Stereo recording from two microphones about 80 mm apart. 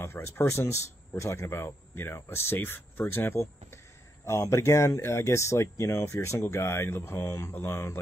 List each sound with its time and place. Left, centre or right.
0.0 s speech: left